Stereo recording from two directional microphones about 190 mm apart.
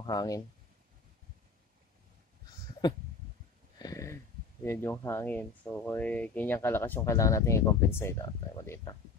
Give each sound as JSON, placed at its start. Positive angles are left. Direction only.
{"t": 0.0, "sound": "speech", "side_deg": 20}
{"t": 3.7, "sound": "a sound", "side_deg": 20}
{"t": 4.6, "sound": "speech", "side_deg": 15}